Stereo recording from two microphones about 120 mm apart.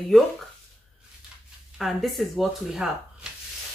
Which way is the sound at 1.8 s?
Centre (ahead or behind).